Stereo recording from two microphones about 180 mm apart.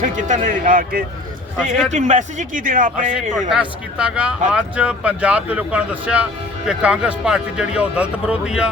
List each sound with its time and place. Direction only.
0.0 s speech: 45° right (ahead or behind)
3.5 s speech: 5° right (ahead or behind)